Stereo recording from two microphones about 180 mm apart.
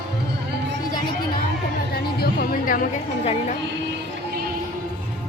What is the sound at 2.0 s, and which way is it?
Music, 60° left (ahead or behind).